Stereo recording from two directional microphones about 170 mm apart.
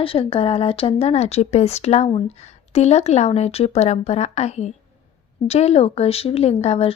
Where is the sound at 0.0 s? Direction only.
30° left (ahead or behind).